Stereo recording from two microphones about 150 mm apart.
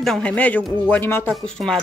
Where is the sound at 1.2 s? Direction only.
5° left (ahead or behind).